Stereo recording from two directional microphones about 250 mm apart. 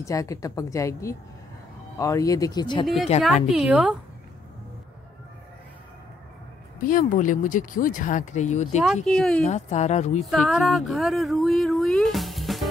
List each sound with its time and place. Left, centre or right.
0.0 s a woman's voice: centre
3.5 s speech: centre
6.8 s speech: left
8.8 s speech: centre
9.4 s speech: left
10.3 s speech: centre